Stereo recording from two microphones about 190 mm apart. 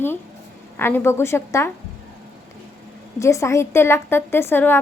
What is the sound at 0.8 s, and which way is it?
Speech, 10° left (ahead or behind).